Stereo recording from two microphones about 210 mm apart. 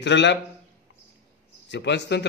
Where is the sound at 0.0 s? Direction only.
60° left (ahead or behind).